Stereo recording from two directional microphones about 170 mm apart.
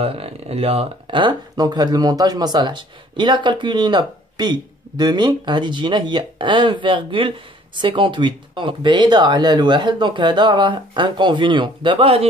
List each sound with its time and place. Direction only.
0.0 s speech: 35° right (ahead or behind)